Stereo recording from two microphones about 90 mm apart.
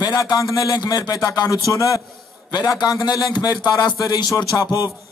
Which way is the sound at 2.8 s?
50° left (ahead or behind).